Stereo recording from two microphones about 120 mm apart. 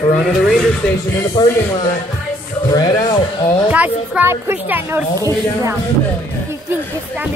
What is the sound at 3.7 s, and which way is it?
A woman's voice, 10° right (ahead or behind).